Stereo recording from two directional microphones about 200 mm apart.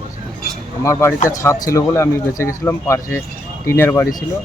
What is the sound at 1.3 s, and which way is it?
Speech, 15° left (ahead or behind).